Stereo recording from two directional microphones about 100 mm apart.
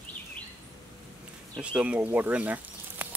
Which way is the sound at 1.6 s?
10° right (ahead or behind).